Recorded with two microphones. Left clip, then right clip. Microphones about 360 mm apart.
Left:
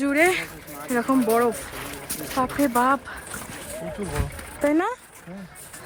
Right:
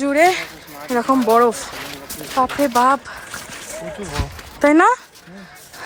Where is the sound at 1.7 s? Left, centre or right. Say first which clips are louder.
Right 5 dB; right.